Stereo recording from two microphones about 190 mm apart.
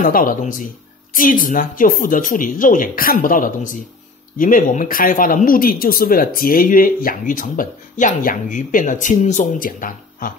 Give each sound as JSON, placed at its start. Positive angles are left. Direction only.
{"t": 0.0, "sound": "speech", "side_deg": 45}